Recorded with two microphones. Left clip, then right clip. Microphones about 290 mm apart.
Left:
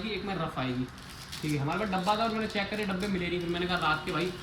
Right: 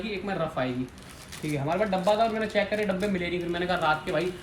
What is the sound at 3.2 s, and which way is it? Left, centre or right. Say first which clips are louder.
A man's voice: right 2 dB; centre.